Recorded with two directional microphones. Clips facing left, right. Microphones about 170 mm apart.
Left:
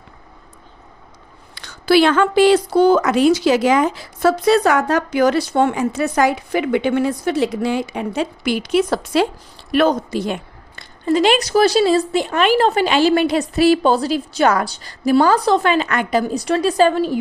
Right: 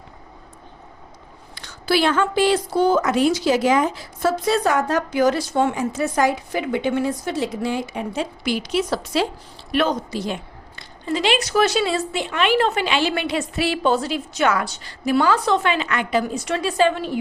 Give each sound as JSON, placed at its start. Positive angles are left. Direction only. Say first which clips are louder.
{"t": 1.5, "sound": "a woman's voice", "louder": "left 7 dB", "side_deg": 75}